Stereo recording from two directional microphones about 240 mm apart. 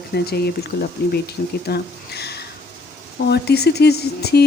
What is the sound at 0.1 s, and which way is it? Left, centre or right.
Speech, left.